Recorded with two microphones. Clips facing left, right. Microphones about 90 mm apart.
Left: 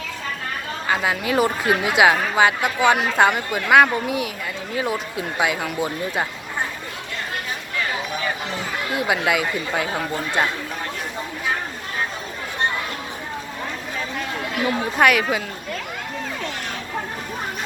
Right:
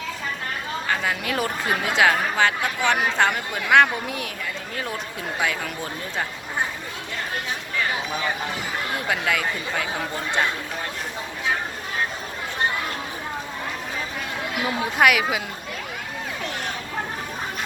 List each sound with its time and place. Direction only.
0.9 s speech: 5° left (ahead or behind)
9.0 s speech: 10° left (ahead or behind)
14.6 s speech: 5° right (ahead or behind)